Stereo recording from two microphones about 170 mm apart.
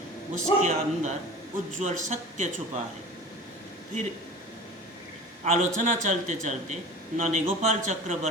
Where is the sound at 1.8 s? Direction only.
45° right (ahead or behind).